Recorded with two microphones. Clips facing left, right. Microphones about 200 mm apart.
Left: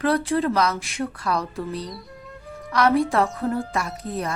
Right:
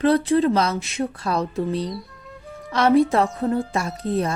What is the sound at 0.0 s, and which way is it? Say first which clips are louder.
A woman's voice: right 4 dB; 20° right (ahead or behind).